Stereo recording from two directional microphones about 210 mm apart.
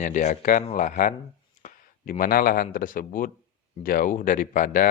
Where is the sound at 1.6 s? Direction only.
40° left (ahead or behind).